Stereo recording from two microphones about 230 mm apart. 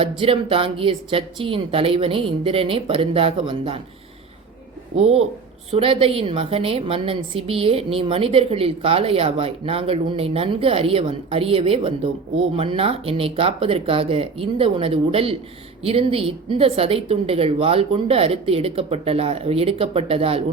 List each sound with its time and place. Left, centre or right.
0.0 s a woman's voice: right
4.9 s a woman's voice: right